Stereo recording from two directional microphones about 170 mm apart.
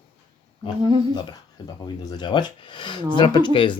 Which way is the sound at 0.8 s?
30° right (ahead or behind).